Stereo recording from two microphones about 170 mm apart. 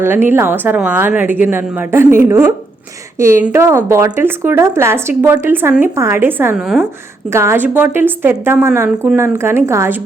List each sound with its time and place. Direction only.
0.0 s speech: 15° right (ahead or behind)